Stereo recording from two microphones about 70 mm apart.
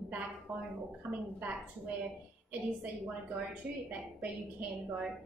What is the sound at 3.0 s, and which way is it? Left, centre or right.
A woman's voice, right.